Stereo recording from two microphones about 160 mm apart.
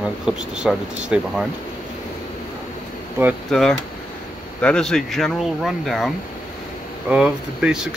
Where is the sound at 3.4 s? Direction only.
5° left (ahead or behind).